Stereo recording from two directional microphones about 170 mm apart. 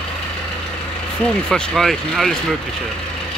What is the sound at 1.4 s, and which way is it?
Speech, centre (ahead or behind).